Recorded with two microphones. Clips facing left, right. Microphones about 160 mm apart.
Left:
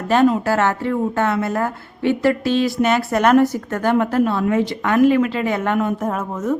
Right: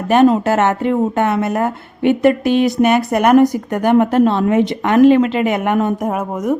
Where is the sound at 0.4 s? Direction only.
20° right (ahead or behind).